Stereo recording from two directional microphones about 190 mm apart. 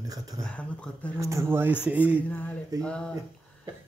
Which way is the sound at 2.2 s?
10° left (ahead or behind).